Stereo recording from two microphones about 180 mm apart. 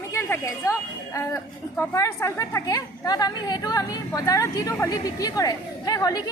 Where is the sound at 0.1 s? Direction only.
15° left (ahead or behind).